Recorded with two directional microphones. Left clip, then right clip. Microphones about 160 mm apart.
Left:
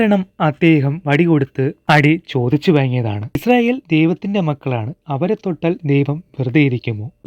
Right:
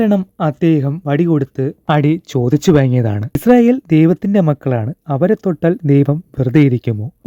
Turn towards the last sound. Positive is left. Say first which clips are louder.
# right 3 dB
turn(degrees=-35)  # may be behind; listen again after turning